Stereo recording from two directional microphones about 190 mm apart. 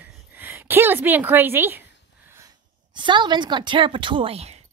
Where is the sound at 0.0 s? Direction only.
10° right (ahead or behind).